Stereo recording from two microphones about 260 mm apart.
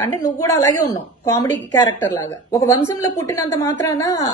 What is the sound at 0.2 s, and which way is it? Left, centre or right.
A woman's voice, centre.